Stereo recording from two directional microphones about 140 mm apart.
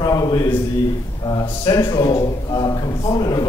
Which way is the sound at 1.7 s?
30° left (ahead or behind).